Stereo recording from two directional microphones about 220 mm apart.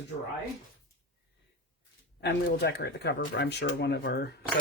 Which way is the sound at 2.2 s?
50° left (ahead or behind).